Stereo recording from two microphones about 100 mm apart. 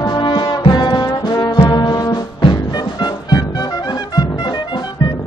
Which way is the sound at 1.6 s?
45° left (ahead or behind).